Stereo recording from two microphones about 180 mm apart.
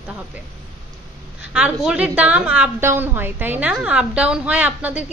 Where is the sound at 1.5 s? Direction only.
5° right (ahead or behind).